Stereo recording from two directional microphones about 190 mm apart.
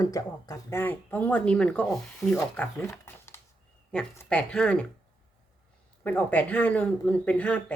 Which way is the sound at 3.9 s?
5° left (ahead or behind).